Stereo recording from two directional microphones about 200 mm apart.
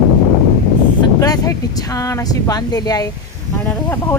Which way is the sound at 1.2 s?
20° left (ahead or behind).